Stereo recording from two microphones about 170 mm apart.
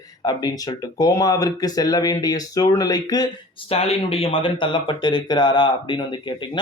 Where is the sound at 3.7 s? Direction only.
35° left (ahead or behind).